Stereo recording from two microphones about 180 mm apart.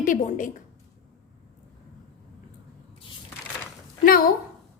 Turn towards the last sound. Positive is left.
turn(degrees=55)  # may be behind; listen again after turning